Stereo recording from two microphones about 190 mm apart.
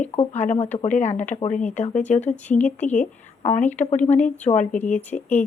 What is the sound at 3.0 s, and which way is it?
A woman's voice, 40° left (ahead or behind).